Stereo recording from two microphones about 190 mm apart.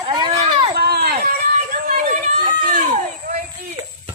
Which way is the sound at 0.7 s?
55° right (ahead or behind).